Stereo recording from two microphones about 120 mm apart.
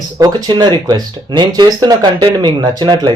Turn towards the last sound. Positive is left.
turn(degrees=-40)  # may be behind; listen again after turning